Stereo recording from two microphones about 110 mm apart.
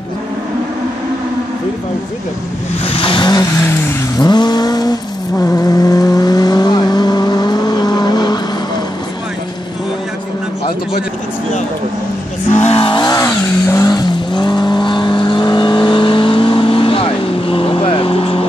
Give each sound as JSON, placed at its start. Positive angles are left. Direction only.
{"t": 2.8, "sound": "vehicle", "side_deg": 55}
{"t": 4.2, "sound": "vehicle", "side_deg": 40}
{"t": 12.4, "sound": "vehicle", "side_deg": 85}
{"t": 13.1, "sound": "vehicle", "side_deg": 25}
{"t": 13.9, "sound": "vehicle", "side_deg": 40}